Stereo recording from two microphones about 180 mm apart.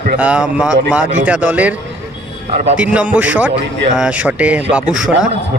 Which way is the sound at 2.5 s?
45° right (ahead or behind).